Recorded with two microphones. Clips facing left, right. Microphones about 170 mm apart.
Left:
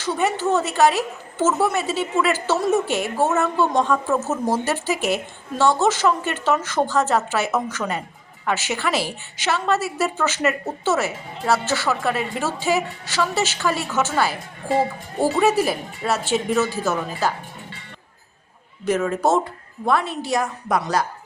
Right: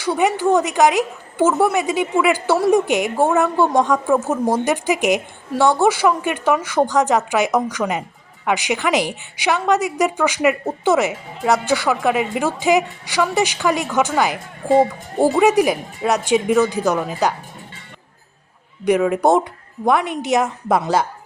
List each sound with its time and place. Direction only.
0.0 s a woman's voice: 15° right (ahead or behind)
18.9 s a woman's voice: 15° right (ahead or behind)